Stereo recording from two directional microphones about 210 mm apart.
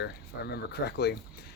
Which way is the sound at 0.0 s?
50° left (ahead or behind).